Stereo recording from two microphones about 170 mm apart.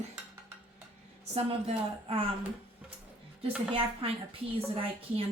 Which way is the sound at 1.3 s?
35° right (ahead or behind).